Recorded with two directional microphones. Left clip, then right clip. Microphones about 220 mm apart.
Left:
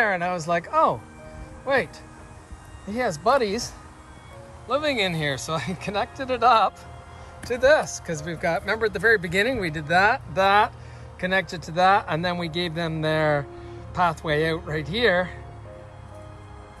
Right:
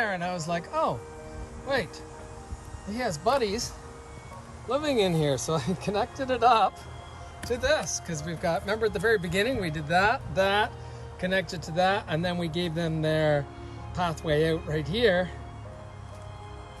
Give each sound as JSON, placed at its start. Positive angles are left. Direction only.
{"t": 0.0, "sound": "speech", "side_deg": -10}
{"t": 2.9, "sound": "speech", "side_deg": -5}